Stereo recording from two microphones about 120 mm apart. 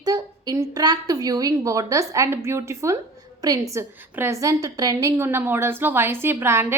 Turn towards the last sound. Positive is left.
turn(degrees=-20)  # may be behind; listen again after turning